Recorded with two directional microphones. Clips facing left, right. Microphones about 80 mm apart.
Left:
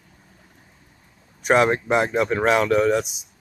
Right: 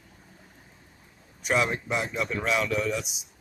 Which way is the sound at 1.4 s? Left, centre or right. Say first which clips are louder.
Left 8 dB; left.